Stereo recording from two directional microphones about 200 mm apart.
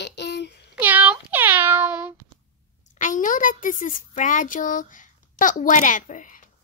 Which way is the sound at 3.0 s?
40° left (ahead or behind).